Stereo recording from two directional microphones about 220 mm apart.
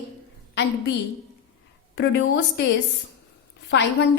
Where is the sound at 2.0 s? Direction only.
55° left (ahead or behind).